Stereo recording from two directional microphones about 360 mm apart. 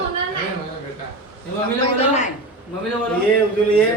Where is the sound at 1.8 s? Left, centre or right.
Centre.